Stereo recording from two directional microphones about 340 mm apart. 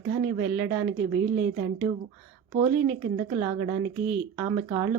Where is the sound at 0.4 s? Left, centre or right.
Centre.